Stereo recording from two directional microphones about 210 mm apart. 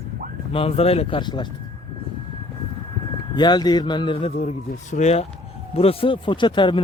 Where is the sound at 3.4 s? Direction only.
20° left (ahead or behind).